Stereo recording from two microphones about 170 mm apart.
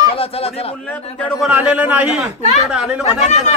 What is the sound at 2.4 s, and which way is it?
Speech, 40° left (ahead or behind).